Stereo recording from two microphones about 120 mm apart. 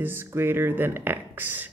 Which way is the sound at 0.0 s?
20° right (ahead or behind).